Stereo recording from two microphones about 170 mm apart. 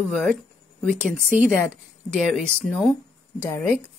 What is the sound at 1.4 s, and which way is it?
Speech, 5° left (ahead or behind).